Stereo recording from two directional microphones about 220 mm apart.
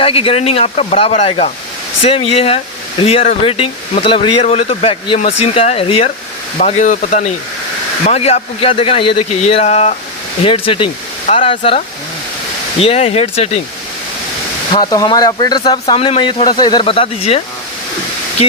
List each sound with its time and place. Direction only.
0.0 s speech: 25° left (ahead or behind)
12.8 s speech: 25° left (ahead or behind)
14.7 s speech: 20° left (ahead or behind)